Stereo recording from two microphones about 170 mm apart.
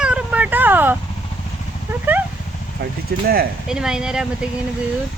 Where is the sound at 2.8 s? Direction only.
65° right (ahead or behind).